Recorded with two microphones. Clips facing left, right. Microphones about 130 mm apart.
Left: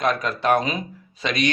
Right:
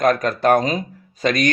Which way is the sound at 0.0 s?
45° right (ahead or behind).